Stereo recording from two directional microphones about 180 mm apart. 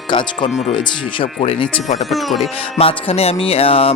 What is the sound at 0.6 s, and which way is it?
Music, 30° left (ahead or behind).